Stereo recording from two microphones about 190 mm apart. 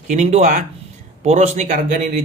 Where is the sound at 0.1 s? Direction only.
40° right (ahead or behind).